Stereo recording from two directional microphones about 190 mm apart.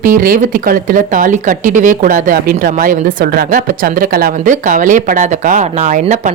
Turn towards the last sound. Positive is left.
turn(degrees=-40)  # may be behind; listen again after turning